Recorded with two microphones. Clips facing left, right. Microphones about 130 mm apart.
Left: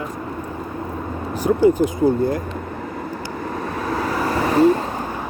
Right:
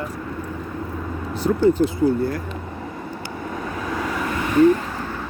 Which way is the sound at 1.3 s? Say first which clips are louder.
Left 2 dB; 10° left (ahead or behind).